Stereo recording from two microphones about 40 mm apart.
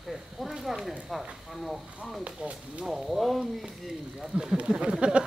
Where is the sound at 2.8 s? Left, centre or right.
Centre.